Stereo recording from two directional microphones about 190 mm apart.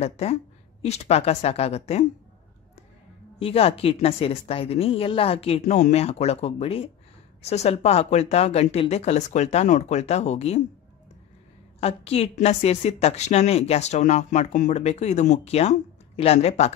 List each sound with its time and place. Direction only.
0.0 s a woman's voice: 35° left (ahead or behind)
3.3 s a woman's voice: 30° left (ahead or behind)
11.8 s a woman's voice: 30° left (ahead or behind)